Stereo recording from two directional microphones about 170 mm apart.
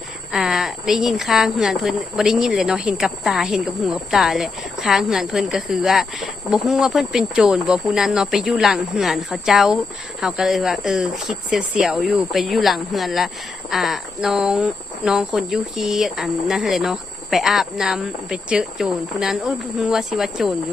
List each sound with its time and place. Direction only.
0.3 s speech: centre (ahead or behind)